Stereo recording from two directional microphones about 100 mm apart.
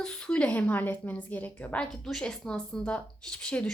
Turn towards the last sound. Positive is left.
turn(degrees=10)  # may be behind; listen again after turning